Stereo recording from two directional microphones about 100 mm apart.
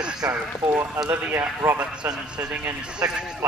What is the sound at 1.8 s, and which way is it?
A man's voice, 10° right (ahead or behind).